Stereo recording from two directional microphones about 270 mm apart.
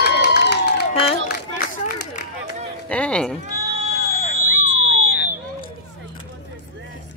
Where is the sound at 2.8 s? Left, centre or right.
Centre.